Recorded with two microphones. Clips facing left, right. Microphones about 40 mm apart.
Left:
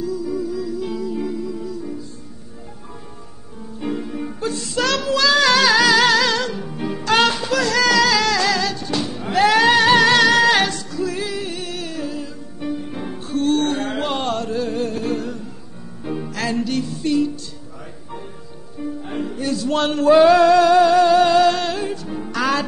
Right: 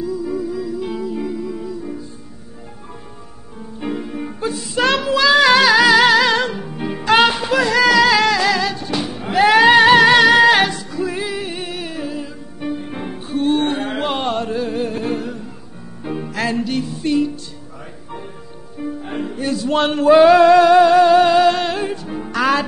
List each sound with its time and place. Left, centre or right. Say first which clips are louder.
0.0 s music: right 1 dB; right
3.8 s music: right 1 dB; centre
18.8 s music: right 1 dB; right